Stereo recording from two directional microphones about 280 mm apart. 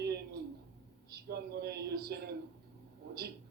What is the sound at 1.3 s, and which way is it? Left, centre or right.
A man's voice, right.